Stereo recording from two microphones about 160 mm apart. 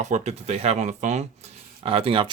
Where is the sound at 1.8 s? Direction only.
35° right (ahead or behind).